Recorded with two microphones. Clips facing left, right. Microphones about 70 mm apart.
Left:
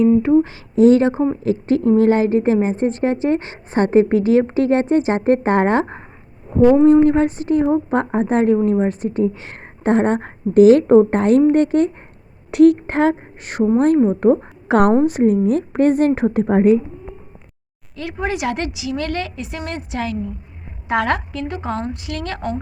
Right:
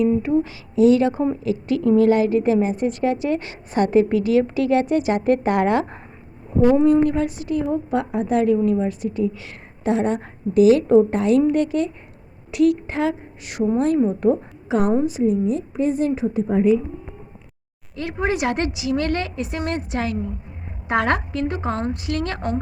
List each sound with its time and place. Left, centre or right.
0.0 s a woman's voice: left
6.5 s a woman's voice: left
14.7 s a woman's voice: left
17.9 s a woman's voice: right